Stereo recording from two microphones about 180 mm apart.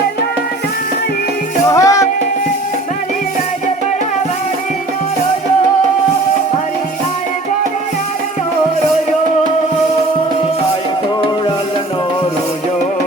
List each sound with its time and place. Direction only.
1.7 s music: 20° left (ahead or behind)